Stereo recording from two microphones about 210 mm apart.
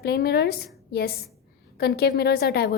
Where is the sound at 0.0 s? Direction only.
50° left (ahead or behind).